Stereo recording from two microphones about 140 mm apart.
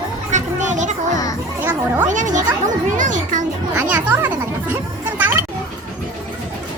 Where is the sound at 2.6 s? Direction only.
65° right (ahead or behind).